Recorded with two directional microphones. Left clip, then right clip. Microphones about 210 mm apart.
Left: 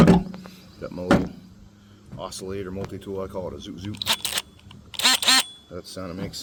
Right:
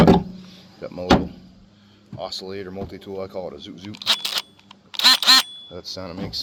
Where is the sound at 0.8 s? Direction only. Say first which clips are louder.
Right 2 dB; 30° left (ahead or behind).